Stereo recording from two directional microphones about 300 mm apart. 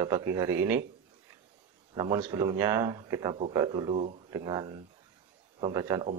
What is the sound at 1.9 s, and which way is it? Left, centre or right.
A man's voice, centre.